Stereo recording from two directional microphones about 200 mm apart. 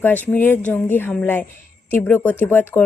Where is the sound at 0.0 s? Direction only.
10° left (ahead or behind).